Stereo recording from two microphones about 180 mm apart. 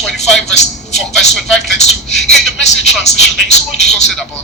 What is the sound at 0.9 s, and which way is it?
Speech, centre (ahead or behind).